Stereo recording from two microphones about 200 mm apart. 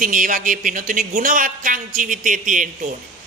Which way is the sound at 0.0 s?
40° right (ahead or behind).